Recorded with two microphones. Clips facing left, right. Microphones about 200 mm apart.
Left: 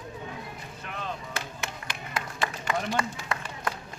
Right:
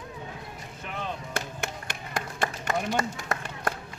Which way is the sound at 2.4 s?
45° right (ahead or behind).